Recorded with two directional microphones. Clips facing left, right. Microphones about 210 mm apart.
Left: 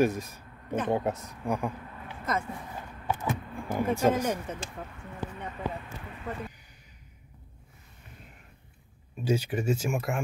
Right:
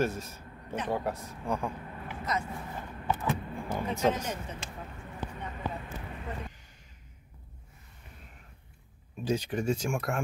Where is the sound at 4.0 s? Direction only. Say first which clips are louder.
Left 3 dB; 10° left (ahead or behind).